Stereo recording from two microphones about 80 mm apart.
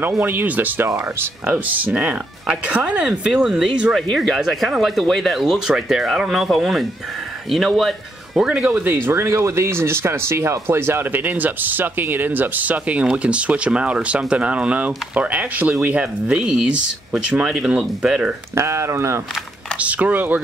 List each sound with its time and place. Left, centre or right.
0.2 s speech: right
0.8 s speech: right
1.4 s speech: centre
8.4 s speech: centre
9.0 s speech: right; by 18.3 s centre
18.5 s speech: right
19.8 s speech: centre